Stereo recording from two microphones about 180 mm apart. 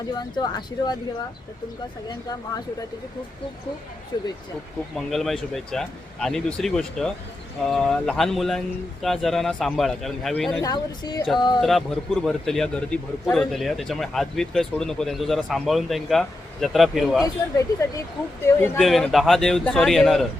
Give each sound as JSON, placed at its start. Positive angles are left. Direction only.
{"t": 0.1, "sound": "speech", "side_deg": 25}
{"t": 4.1, "sound": "speech", "side_deg": 25}
{"t": 4.9, "sound": "speech", "side_deg": 0}
{"t": 10.6, "sound": "speech", "side_deg": 20}
{"t": 11.6, "sound": "speech", "side_deg": 0}
{"t": 17.2, "sound": "speech", "side_deg": 20}
{"t": 18.8, "sound": "speech", "side_deg": 0}